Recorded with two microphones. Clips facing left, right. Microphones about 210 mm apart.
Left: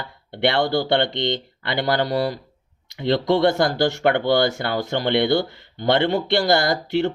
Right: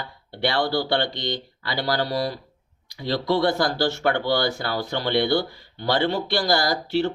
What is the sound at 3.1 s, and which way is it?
Speech, 20° left (ahead or behind).